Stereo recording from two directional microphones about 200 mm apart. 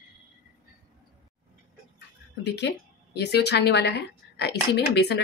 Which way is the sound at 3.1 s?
55° left (ahead or behind).